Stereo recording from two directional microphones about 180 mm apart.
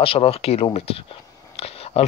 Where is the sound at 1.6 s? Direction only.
35° left (ahead or behind).